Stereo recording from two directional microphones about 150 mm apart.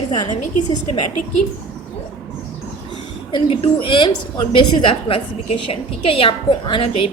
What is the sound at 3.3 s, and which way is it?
A woman's voice, 35° left (ahead or behind).